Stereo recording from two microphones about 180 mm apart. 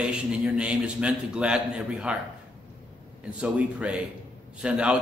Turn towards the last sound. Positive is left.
turn(degrees=-5)  # may be behind; listen again after turning